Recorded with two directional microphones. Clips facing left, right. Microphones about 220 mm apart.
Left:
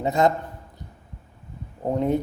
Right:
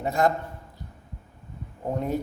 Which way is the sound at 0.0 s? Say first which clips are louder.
Left 3 dB; 20° left (ahead or behind).